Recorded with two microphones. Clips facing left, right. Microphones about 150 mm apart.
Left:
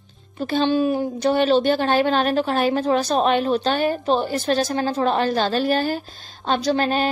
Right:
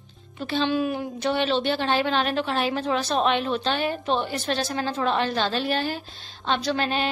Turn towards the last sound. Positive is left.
turn(degrees=45)  # may be behind; listen again after turning